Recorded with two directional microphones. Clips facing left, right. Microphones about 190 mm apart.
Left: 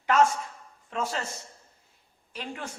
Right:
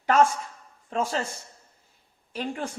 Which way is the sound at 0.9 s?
35° right (ahead or behind).